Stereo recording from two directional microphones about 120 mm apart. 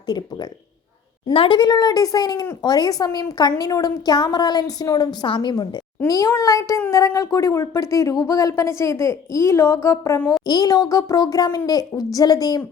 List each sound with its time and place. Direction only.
1.3 s a woman's voice: 50° left (ahead or behind)
1.5 s speech: 35° left (ahead or behind)